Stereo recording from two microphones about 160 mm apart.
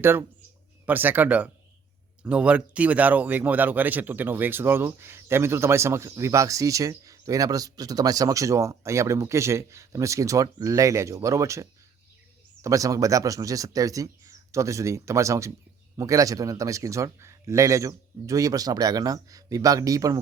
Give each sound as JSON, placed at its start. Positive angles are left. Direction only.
{"t": 0.0, "sound": "a man's voice", "side_deg": -15}